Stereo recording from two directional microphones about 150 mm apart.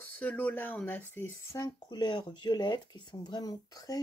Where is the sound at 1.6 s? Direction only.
30° left (ahead or behind).